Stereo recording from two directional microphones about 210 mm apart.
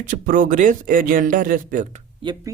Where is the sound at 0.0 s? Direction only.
40° right (ahead or behind).